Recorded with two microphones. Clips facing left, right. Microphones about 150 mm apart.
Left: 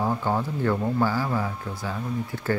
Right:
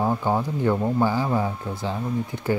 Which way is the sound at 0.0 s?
15° right (ahead or behind).